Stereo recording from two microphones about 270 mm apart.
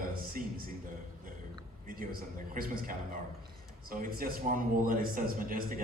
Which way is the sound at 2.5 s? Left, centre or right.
Right.